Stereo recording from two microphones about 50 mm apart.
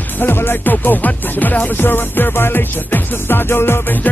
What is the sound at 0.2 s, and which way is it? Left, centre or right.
Speech, left.